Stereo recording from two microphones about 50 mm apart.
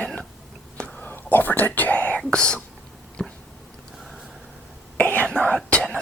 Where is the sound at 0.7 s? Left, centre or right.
Left.